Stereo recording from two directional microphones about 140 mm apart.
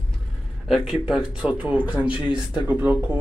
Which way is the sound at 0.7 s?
Centre (ahead or behind).